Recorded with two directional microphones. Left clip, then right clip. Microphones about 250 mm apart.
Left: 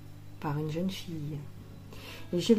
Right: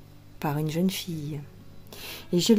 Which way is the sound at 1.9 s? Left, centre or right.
Right.